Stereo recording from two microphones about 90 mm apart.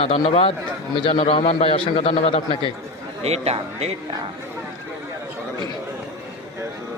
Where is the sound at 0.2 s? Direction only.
75° left (ahead or behind).